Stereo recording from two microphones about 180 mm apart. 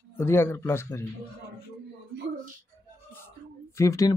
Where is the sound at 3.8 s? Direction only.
15° left (ahead or behind).